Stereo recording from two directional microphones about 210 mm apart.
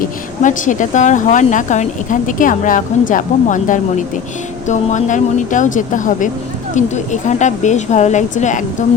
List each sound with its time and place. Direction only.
0.4 s speech: 35° left (ahead or behind)